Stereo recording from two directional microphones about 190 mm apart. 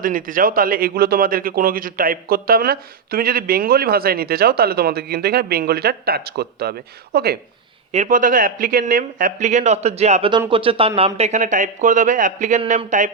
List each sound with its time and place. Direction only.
0.0 s a man's voice: 45° right (ahead or behind)
7.9 s speech: 40° right (ahead or behind)